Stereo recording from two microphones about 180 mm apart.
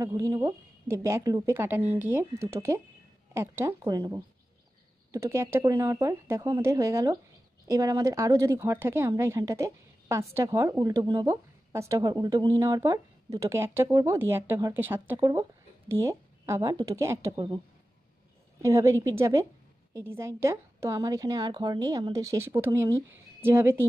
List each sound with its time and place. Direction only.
0.0 s speech: 15° right (ahead or behind)
18.6 s speech: 15° right (ahead or behind)